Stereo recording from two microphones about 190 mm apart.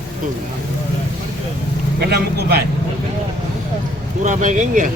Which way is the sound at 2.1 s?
60° right (ahead or behind).